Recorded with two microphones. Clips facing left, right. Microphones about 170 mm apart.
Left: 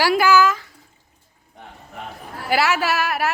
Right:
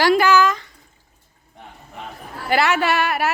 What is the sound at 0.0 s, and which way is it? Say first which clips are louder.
Speech: right 1 dB; 5° left (ahead or behind).